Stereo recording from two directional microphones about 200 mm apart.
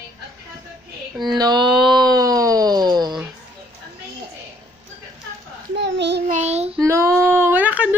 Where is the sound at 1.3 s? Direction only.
20° right (ahead or behind).